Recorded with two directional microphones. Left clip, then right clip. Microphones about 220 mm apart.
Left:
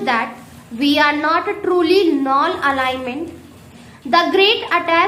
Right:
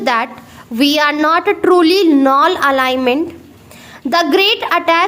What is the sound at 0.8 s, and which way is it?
A woman's voice, 45° right (ahead or behind).